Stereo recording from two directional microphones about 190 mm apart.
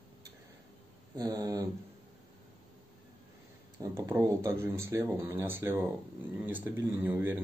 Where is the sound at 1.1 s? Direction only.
20° right (ahead or behind).